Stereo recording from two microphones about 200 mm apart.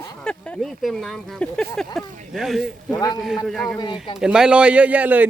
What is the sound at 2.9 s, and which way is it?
Speech, 20° left (ahead or behind).